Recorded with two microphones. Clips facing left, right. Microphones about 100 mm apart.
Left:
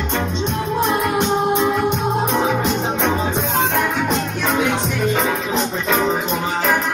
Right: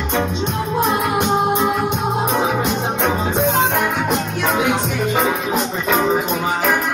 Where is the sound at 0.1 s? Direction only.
5° right (ahead or behind).